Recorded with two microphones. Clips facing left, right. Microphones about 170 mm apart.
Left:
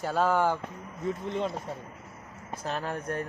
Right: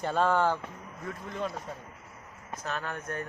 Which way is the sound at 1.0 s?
25° left (ahead or behind).